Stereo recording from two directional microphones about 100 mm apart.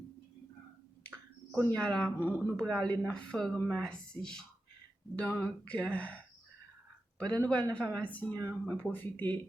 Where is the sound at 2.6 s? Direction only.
10° left (ahead or behind).